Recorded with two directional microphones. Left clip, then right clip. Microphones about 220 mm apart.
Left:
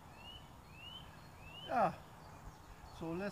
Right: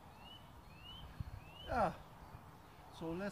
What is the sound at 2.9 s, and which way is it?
Speech, 5° right (ahead or behind).